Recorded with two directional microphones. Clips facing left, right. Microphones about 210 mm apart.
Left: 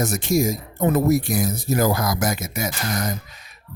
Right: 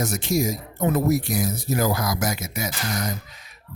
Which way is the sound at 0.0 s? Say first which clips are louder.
Left 3 dB; 50° left (ahead or behind).